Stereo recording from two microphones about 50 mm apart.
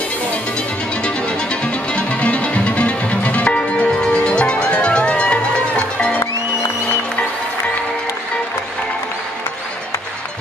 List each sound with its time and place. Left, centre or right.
1.6 s music: left